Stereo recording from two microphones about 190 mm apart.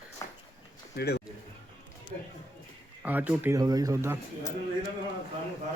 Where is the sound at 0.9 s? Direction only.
60° left (ahead or behind).